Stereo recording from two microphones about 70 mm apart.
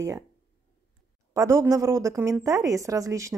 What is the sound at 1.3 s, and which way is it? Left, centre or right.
Speech, right.